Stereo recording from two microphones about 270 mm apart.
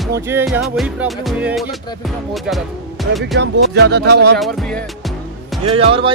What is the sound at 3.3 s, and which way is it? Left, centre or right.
Music, right.